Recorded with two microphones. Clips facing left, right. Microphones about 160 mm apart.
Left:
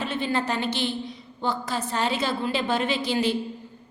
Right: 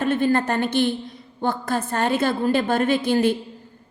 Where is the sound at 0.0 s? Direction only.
50° right (ahead or behind).